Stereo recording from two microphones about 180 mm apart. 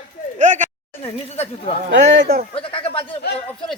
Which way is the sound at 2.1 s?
60° right (ahead or behind).